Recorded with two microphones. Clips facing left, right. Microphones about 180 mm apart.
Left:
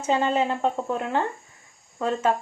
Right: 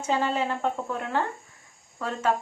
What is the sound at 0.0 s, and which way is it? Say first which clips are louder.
A woman's voice: left 3 dB; 20° left (ahead or behind).